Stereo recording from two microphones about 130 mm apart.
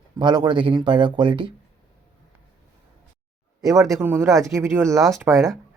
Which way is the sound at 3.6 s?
25° right (ahead or behind).